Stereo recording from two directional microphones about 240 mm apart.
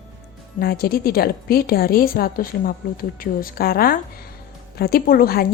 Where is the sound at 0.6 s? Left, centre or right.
Left.